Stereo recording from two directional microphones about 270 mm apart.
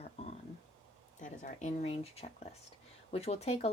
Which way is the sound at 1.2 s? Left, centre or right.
Left.